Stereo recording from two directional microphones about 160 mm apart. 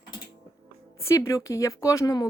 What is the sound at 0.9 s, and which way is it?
A woman's voice, 15° left (ahead or behind).